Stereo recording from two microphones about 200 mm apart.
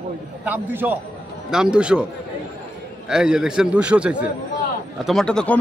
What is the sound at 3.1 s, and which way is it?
A man's voice, 5° right (ahead or behind).